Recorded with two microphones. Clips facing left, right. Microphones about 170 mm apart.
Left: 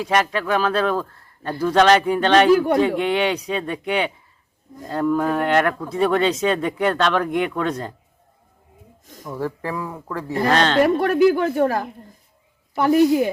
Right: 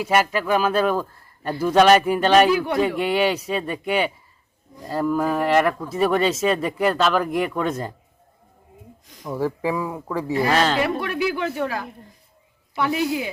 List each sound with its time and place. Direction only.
0.0 s speech: 5° right (ahead or behind)
2.5 s speech: 45° left (ahead or behind)
2.8 s speech: 5° right (ahead or behind)
9.2 s speech: 10° right (ahead or behind)
10.8 s speech: 45° left (ahead or behind)